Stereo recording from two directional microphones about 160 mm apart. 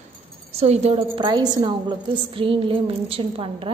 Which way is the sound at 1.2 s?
25° right (ahead or behind).